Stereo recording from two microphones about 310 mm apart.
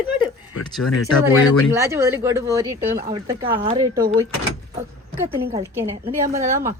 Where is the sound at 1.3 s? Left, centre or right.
Centre.